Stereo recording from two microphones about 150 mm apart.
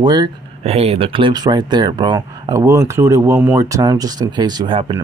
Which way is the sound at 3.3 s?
10° right (ahead or behind).